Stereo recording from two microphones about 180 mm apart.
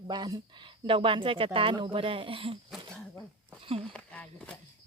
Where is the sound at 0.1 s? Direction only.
20° right (ahead or behind).